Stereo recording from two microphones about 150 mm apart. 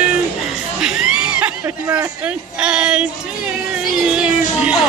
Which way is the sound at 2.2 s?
5° right (ahead or behind).